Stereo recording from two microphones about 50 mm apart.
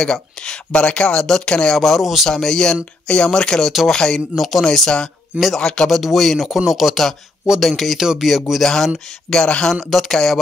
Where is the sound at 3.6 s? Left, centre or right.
Centre.